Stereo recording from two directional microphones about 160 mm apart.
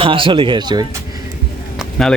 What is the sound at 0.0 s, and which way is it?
Speech, 30° right (ahead or behind).